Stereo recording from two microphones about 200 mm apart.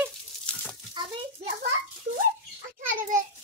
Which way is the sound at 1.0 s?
20° right (ahead or behind).